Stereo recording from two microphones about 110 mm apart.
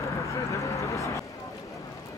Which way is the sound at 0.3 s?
30° left (ahead or behind).